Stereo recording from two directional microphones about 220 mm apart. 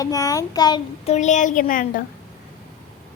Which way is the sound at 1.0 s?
30° left (ahead or behind).